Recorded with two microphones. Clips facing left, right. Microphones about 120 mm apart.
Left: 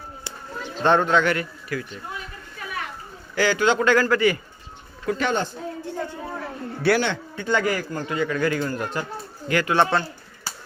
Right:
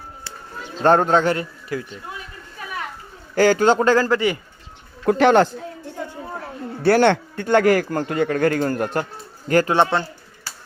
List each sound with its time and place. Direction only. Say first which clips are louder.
0.8 s speech: right 3 dB; 40° right (ahead or behind)
3.3 s a man's voice: right 5 dB; 45° right (ahead or behind)
3.8 s speech: right 2 dB; 30° right (ahead or behind)
5.0 s a man's voice: right 9 dB; 65° right (ahead or behind)
7.0 s a man's voice: right 9 dB; 55° right (ahead or behind)
9.5 s a man's voice: right 6 dB; 40° right (ahead or behind)
9.7 s speech: right 2 dB; 20° right (ahead or behind)